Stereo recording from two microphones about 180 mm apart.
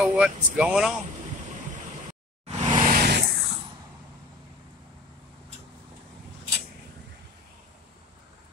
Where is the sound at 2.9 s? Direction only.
60° right (ahead or behind).